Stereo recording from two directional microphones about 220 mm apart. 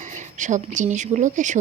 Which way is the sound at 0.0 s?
35° right (ahead or behind).